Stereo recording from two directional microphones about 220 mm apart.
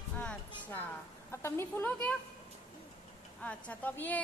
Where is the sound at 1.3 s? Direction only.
10° left (ahead or behind).